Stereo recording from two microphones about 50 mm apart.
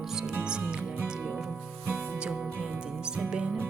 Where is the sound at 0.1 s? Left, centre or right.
Centre.